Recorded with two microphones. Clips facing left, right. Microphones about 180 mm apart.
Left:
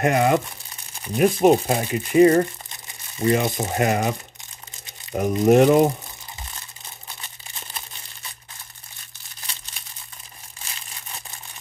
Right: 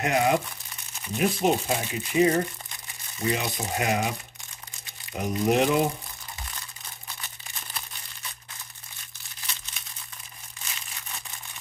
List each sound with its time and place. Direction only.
0.0 s speech: 50° left (ahead or behind)
5.1 s speech: 45° left (ahead or behind)